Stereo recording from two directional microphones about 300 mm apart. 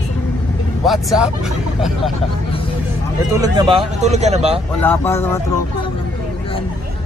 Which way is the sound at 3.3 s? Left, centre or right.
Centre.